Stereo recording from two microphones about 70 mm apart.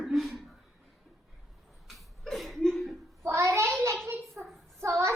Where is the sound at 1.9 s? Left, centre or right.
Centre.